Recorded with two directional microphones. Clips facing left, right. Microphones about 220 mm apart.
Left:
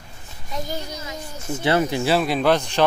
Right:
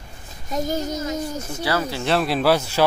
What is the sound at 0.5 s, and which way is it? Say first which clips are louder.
Speech: right 6 dB; 45° right (ahead or behind).